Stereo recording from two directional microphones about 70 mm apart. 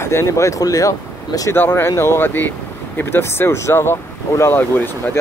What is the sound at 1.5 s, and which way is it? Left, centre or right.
Speech, left.